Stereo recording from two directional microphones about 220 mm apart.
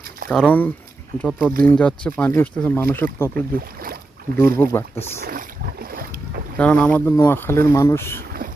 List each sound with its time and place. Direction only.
0.3 s speech: 5° left (ahead or behind)
4.4 s speech: 10° left (ahead or behind)
5.2 s boat: 40° right (ahead or behind)
6.6 s speech: 5° left (ahead or behind)